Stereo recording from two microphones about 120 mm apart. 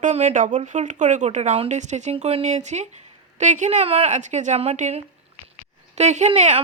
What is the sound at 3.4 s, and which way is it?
A woman's voice, 85° right.